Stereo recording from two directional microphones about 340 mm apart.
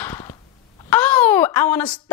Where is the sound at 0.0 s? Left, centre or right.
Centre.